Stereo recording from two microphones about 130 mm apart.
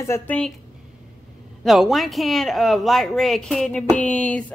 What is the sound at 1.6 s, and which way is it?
A woman's voice, centre (ahead or behind).